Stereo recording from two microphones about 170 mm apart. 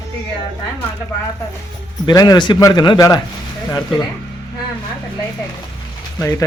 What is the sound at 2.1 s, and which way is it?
Speech, 25° left (ahead or behind).